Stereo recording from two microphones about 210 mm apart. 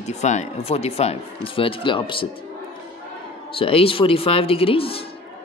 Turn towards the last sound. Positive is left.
turn(degrees=25)  # may be behind; listen again after turning